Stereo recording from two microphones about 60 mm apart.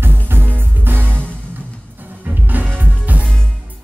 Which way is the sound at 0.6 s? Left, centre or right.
Right.